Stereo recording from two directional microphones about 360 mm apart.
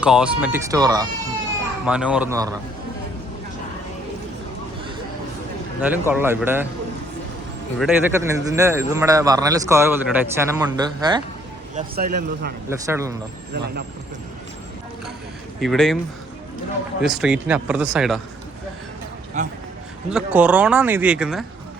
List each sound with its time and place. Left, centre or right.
0.0 s speech: centre
5.8 s speech: centre
7.8 s a man's voice: centre
11.7 s speech: right
12.9 s a man's voice: centre
15.6 s speech: centre
17.0 s speech: centre
19.4 s speech: centre
20.1 s speech: centre